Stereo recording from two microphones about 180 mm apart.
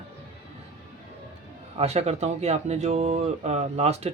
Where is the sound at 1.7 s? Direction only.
35° right (ahead or behind).